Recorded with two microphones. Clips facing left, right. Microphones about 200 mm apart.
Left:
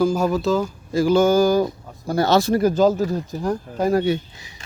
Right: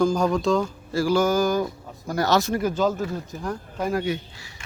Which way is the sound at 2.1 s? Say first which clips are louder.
Left 4 dB; 30° left (ahead or behind).